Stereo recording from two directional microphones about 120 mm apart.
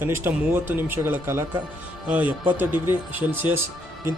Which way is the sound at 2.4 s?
15° right (ahead or behind).